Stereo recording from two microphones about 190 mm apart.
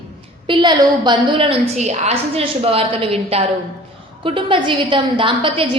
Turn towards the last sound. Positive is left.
turn(degrees=-25)  # may be behind; listen again after turning